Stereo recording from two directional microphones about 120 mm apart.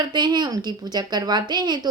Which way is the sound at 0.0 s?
40° right (ahead or behind).